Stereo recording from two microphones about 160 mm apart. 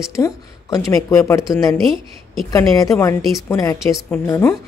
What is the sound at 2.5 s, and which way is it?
Speech, 20° left (ahead or behind).